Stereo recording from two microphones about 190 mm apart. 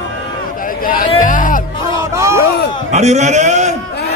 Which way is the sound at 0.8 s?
45° left (ahead or behind).